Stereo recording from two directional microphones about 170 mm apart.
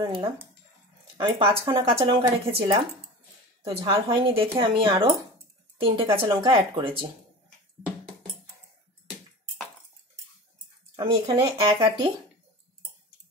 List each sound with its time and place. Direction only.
0.0 s speech: 25° right (ahead or behind)
11.0 s speech: 30° right (ahead or behind)